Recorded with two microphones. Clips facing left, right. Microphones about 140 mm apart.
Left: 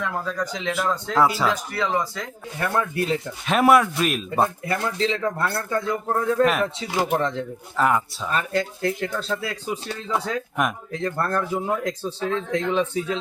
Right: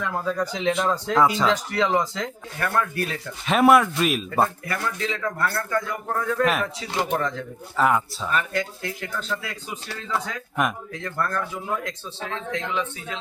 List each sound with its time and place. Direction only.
0.0 s speech: 10° right (ahead or behind)
1.1 s speech: 5° left (ahead or behind)
1.7 s speech: 20° right (ahead or behind)
2.6 s speech: 20° left (ahead or behind)
3.4 s speech: centre (ahead or behind)
4.4 s speech: 25° left (ahead or behind)
6.4 s speech: centre (ahead or behind)
7.2 s speech: 25° left (ahead or behind)
7.8 s speech: centre (ahead or behind)
8.3 s speech: 35° left (ahead or behind)